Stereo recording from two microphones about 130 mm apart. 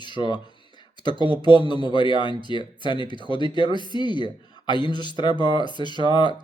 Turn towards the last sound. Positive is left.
turn(degrees=35)  # may be behind; listen again after turning